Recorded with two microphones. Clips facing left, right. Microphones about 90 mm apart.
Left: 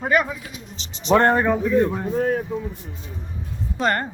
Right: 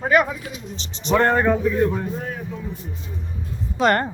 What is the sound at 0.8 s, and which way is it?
Speech, 40° right (ahead or behind).